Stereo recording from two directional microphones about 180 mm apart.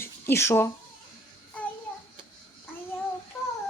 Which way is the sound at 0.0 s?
15° left (ahead or behind).